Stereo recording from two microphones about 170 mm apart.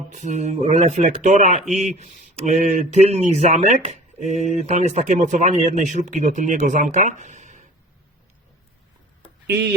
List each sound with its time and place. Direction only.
0.1 s speech: 45° right (ahead or behind)
9.5 s speech: 75° right (ahead or behind)